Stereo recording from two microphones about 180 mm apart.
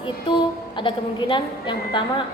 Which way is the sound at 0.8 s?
25° left (ahead or behind).